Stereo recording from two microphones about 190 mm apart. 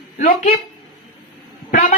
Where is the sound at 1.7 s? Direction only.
40° left (ahead or behind).